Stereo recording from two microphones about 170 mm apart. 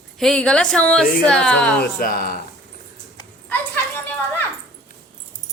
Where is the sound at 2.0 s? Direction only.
60° left (ahead or behind).